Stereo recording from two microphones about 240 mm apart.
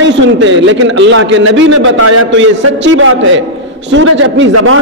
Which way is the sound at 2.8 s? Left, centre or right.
Right.